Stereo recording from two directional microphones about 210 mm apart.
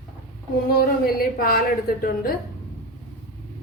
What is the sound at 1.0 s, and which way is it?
A woman's voice, 45° left (ahead or behind).